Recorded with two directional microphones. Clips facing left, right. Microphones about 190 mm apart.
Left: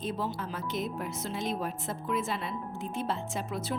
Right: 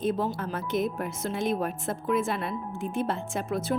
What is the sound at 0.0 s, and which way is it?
Speech, 50° right (ahead or behind).